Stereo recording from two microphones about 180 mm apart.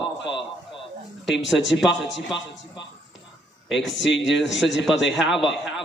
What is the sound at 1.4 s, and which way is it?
Speech, centre (ahead or behind).